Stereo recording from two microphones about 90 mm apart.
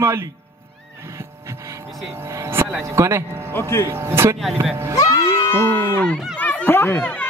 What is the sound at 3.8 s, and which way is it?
Speech, 25° right (ahead or behind).